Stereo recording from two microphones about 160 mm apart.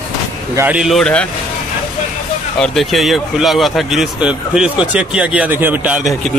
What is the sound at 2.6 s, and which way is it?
Speech, centre (ahead or behind).